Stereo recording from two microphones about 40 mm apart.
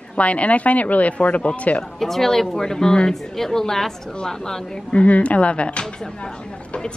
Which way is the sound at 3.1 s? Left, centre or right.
Centre.